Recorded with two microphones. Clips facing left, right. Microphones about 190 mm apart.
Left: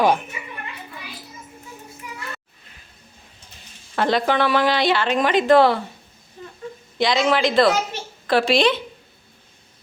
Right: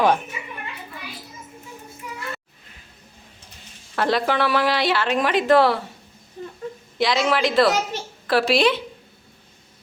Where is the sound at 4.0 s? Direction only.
5° right (ahead or behind).